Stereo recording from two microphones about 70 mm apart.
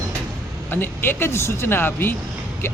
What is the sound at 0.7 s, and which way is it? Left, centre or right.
Speech, left.